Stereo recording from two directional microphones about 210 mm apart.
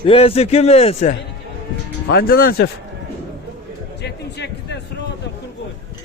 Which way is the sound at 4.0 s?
55° left (ahead or behind).